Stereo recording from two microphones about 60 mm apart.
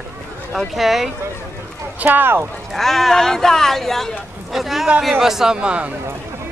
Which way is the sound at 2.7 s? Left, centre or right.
Centre.